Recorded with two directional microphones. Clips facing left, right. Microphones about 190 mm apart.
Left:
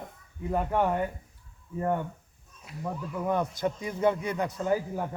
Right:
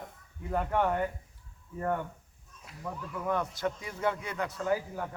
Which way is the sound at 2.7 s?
Centre (ahead or behind).